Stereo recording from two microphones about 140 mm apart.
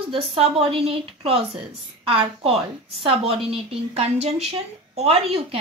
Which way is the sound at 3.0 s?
40° right (ahead or behind).